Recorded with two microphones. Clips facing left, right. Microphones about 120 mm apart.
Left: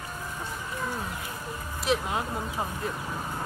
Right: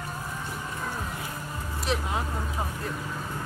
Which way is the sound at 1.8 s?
Centre (ahead or behind).